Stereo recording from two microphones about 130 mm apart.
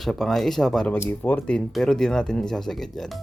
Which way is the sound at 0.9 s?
15° left (ahead or behind).